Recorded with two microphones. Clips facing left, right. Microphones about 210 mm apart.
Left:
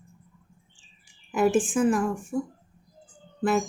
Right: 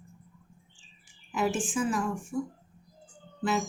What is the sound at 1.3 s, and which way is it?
A woman's voice, 55° left (ahead or behind).